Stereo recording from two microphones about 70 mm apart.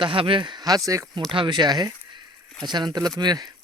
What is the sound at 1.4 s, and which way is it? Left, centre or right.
Speech, right.